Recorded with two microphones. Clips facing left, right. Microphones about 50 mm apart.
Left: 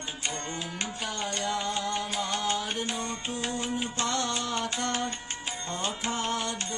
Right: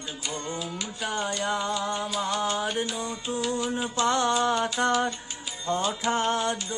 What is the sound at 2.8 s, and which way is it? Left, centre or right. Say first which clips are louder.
Music: right 2 dB; left.